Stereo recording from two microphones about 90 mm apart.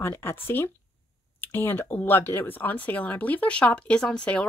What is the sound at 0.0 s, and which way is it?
Speech, 25° left (ahead or behind).